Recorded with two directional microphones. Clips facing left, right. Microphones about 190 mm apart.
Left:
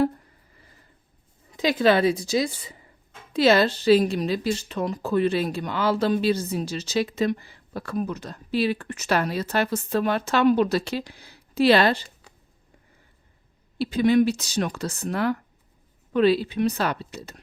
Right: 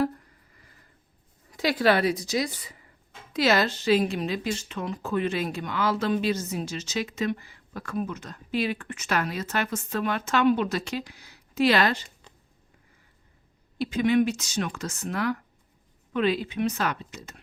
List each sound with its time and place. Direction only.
1.5 s a woman's voice: 20° left (ahead or behind)
13.7 s speech: 35° left (ahead or behind)